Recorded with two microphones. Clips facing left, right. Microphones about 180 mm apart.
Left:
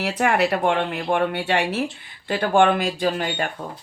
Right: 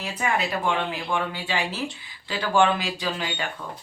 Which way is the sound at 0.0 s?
70° left (ahead or behind).